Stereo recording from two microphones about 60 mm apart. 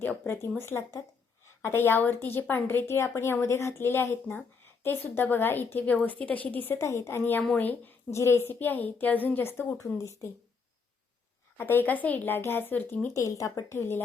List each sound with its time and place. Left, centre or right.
0.0 s speech: left
0.6 s a woman's voice: left
5.8 s speech: left
6.7 s a woman's voice: left
8.1 s a woman's voice: left
8.5 s a woman's voice: left
9.8 s speech: left
11.5 s a woman's voice: left
13.1 s speech: left
13.7 s a woman's voice: left